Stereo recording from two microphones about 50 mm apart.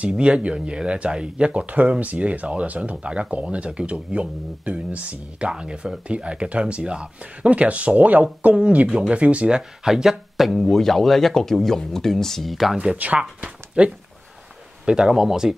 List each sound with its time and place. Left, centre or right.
0.2 s speech: right
5.5 s speech: centre
9.6 s speech: centre
12.9 s speech: right
13.2 s speech: right